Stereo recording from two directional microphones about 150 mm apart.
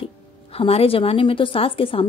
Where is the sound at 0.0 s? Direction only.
40° left (ahead or behind).